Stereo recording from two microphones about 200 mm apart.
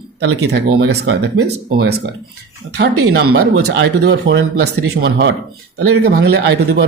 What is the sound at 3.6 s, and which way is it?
Speech, 65° right (ahead or behind).